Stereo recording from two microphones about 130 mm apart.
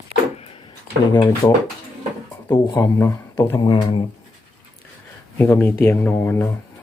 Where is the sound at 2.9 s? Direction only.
20° left (ahead or behind); by 4.0 s 35° left (ahead or behind).